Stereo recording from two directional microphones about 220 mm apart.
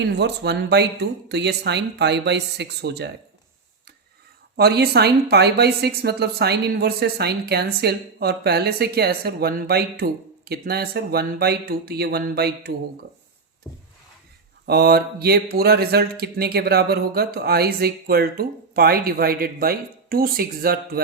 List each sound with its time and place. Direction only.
0.0 s speech: 50° right (ahead or behind)
4.5 s speech: 45° right (ahead or behind)
14.7 s speech: 45° right (ahead or behind)